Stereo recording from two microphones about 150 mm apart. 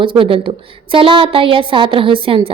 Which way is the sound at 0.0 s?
35° right (ahead or behind).